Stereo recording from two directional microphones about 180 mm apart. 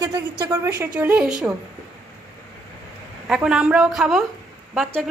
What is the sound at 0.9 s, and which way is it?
Speech, 5° right (ahead or behind).